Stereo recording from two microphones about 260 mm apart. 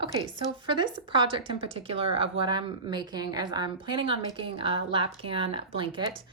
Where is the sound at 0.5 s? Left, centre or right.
Centre.